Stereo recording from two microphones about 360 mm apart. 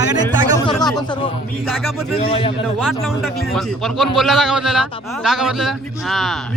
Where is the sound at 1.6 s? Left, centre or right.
Centre.